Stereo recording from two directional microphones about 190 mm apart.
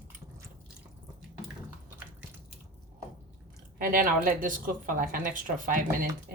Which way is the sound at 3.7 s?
45° right (ahead or behind).